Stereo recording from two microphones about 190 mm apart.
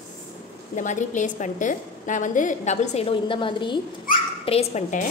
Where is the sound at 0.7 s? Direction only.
40° left (ahead or behind).